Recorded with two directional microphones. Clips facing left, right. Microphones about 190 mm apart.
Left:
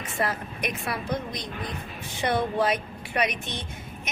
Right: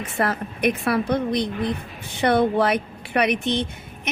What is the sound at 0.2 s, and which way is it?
Speech, 60° right (ahead or behind).